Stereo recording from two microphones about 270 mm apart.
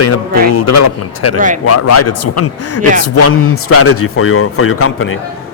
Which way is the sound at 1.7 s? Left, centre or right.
Left.